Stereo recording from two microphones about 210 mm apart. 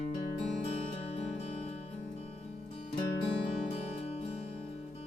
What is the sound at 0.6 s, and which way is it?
Music, 30° left (ahead or behind).